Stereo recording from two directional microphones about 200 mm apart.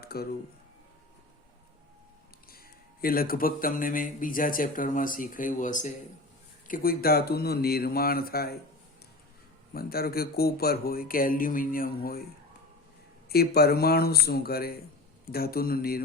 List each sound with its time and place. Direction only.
0.0 s a sound: 50° left (ahead or behind)
3.0 s speech: 45° left (ahead or behind)
9.7 s speech: 50° left (ahead or behind)
13.2 s speech: 50° left (ahead or behind)